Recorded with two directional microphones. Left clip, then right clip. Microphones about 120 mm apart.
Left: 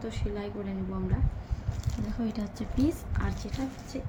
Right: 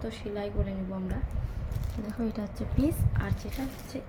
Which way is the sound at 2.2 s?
20° right (ahead or behind).